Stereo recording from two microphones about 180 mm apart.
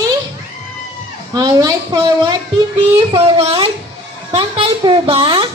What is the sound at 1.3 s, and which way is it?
A woman's voice, 20° right (ahead or behind).